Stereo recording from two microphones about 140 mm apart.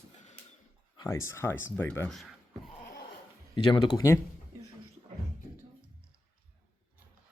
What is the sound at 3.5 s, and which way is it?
Speech, 30° left (ahead or behind).